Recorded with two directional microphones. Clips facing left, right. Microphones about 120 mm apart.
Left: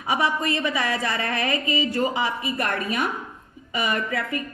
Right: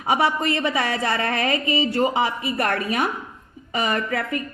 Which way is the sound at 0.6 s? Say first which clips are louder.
Right 2 dB; 30° right (ahead or behind).